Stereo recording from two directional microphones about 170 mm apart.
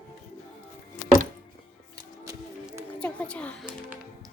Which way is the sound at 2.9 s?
5° left (ahead or behind).